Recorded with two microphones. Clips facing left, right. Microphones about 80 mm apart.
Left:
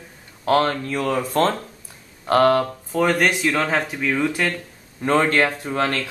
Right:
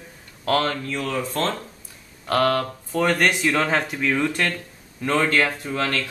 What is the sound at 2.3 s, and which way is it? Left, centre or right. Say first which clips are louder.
Speech: left 4 dB; left.